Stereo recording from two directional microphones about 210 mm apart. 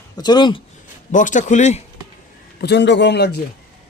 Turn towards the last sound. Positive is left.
turn(degrees=50)  # may be behind; listen again after turning